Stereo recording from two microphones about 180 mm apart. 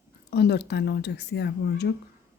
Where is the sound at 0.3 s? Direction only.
70° left (ahead or behind).